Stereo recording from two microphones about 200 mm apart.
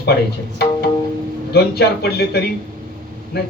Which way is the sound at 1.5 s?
55° left (ahead or behind).